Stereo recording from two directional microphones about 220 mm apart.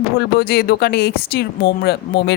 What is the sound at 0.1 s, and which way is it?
Speech, 45° left (ahead or behind).